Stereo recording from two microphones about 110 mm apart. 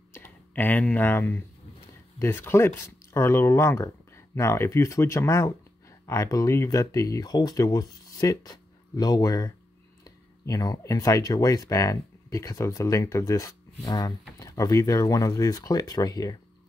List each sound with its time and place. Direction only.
0.1 s speech: 20° left (ahead or behind); by 16.3 s 35° left (ahead or behind)